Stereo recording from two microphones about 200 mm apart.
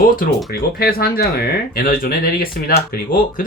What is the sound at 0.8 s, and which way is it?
Speech, 50° left (ahead or behind).